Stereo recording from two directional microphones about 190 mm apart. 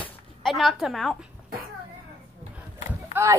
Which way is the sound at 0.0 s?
Centre (ahead or behind).